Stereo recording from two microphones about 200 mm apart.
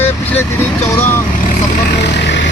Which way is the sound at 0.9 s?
10° left (ahead or behind).